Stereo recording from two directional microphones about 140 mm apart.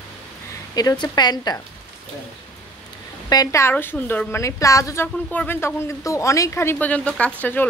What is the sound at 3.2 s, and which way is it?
A woman's voice, 25° left (ahead or behind).